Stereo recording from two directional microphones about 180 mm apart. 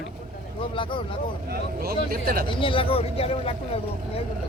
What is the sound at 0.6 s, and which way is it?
Speech, 30° left (ahead or behind).